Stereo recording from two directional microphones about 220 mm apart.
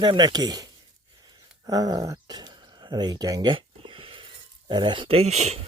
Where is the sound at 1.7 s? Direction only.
15° right (ahead or behind).